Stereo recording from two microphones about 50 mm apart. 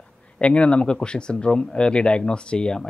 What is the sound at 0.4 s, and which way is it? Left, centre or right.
Speech, left.